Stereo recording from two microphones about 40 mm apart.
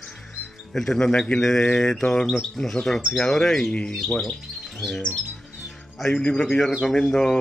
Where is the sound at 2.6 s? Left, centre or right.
Left.